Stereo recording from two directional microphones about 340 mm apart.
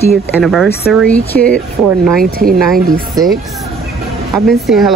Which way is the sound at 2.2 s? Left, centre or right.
Right.